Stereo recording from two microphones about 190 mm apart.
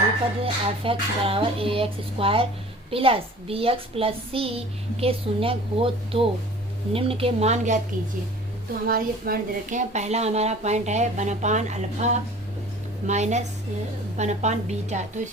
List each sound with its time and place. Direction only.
0.4 s a woman's voice: 30° right (ahead or behind)
8.9 s a woman's voice: 50° right (ahead or behind)